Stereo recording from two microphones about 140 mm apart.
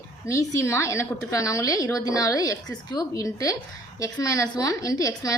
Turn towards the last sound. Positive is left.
turn(degrees=25)  # may be behind; listen again after turning